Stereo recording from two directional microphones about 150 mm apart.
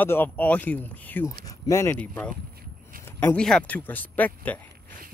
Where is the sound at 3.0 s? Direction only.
15° left (ahead or behind).